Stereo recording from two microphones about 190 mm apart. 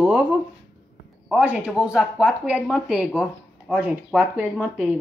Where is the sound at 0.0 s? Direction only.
5° right (ahead or behind).